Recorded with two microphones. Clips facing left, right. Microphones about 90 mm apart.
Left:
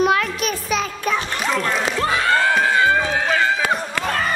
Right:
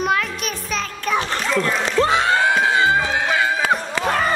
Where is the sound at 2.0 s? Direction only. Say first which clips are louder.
Right 3 dB; 20° right (ahead or behind).